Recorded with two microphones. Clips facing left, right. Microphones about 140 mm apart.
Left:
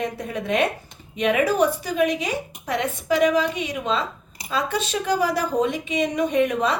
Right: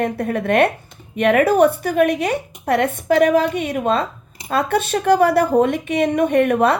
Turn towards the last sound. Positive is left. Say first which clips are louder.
# right 5 dB
turn(degrees=-60)  # may be behind; listen again after turning